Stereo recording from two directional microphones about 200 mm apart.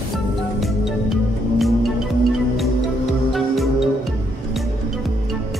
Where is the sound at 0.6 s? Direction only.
Centre (ahead or behind).